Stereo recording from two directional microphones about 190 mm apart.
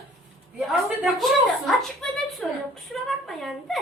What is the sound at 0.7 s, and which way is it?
A woman's voice, centre (ahead or behind).